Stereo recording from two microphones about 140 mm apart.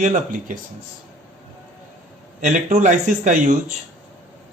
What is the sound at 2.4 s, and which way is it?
Speech, 65° right (ahead or behind).